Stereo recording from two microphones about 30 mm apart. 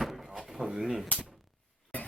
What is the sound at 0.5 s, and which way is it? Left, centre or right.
Speech, centre.